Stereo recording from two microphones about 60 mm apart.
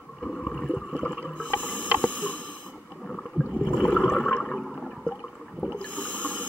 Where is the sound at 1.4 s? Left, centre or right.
Right.